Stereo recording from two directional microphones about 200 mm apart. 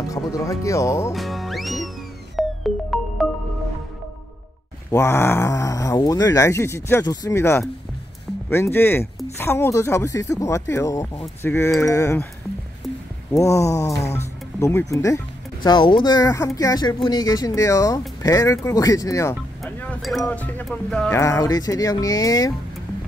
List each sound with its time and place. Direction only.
0.1 s speech: 15° left (ahead or behind)
1.1 s music: centre (ahead or behind)
4.9 s speech: 15° left (ahead or behind)
13.3 s speech: 15° left (ahead or behind)
19.6 s speech: 5° left (ahead or behind)
21.2 s speech: 15° left (ahead or behind)